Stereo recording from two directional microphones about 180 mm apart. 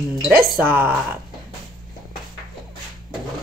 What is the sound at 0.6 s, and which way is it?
Speech, 10° right (ahead or behind).